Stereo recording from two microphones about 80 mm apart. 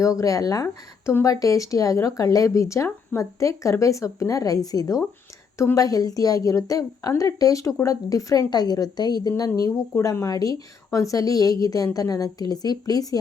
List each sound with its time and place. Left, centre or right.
0.0 s speech: left
10.0 s speech: left